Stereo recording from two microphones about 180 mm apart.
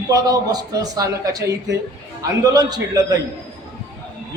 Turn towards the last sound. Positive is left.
turn(degrees=-20)  # may be behind; listen again after turning